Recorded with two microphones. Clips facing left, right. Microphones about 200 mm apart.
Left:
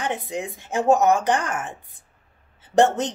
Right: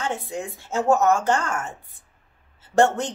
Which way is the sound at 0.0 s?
15° left (ahead or behind).